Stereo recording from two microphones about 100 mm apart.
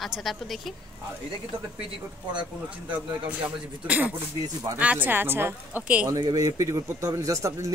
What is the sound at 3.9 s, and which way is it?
Speech, 15° right (ahead or behind).